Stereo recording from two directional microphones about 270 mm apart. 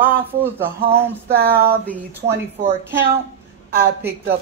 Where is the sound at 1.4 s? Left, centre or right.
Right.